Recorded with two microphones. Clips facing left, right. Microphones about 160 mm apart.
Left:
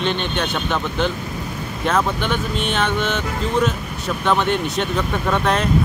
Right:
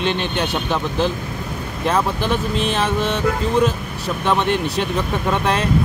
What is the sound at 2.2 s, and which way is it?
Speech, 35° right (ahead or behind).